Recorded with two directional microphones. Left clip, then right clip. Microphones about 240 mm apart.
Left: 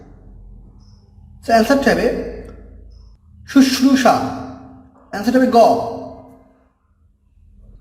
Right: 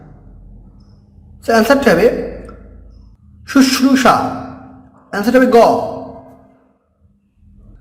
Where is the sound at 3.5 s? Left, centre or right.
Centre.